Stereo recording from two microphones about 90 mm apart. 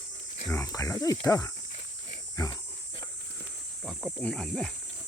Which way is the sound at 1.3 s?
35° left (ahead or behind).